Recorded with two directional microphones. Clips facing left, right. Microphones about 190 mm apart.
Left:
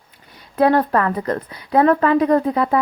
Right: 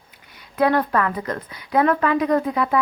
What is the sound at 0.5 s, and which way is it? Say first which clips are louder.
A woman's voice: left 3 dB; 35° left (ahead or behind).